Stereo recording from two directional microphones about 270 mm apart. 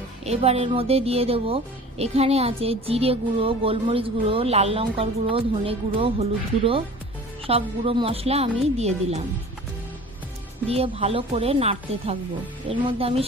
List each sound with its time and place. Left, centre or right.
0.2 s a woman's voice: right
7.4 s a woman's voice: right
10.7 s a woman's voice: right